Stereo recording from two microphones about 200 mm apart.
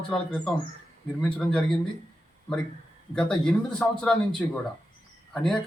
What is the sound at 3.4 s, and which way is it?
A man's voice, 5° left (ahead or behind).